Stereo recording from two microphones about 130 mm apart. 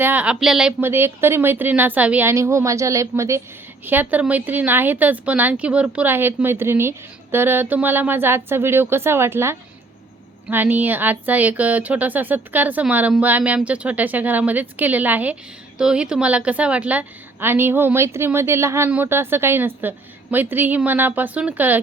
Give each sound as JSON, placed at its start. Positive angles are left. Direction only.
{"t": 0.0, "sound": "speech", "side_deg": -10}
{"t": 0.8, "sound": "a woman's voice", "side_deg": -15}